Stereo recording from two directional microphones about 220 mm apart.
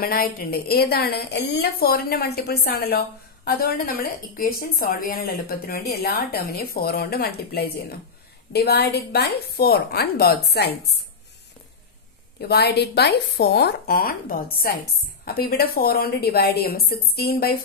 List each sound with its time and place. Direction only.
0.0 s a woman's voice: 40° left (ahead or behind)
12.4 s a woman's voice: 45° left (ahead or behind)